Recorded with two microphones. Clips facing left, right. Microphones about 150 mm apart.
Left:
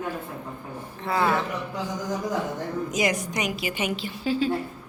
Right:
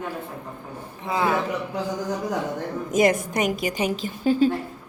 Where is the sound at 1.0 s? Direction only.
15° right (ahead or behind).